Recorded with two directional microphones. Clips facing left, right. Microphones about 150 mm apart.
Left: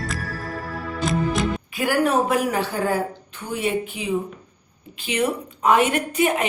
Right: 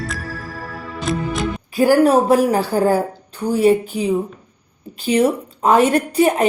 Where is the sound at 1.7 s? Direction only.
35° right (ahead or behind).